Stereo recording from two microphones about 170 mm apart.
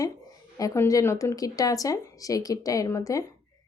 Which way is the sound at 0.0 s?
20° left (ahead or behind).